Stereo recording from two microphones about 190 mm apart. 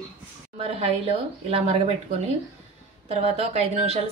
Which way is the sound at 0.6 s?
30° right (ahead or behind).